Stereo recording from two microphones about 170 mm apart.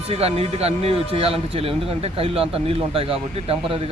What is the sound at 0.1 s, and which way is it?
Speech, 35° right (ahead or behind).